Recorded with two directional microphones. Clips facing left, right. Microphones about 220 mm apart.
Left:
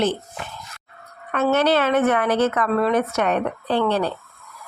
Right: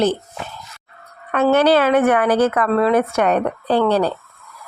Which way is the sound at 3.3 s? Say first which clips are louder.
Right 4 dB; 40° right (ahead or behind).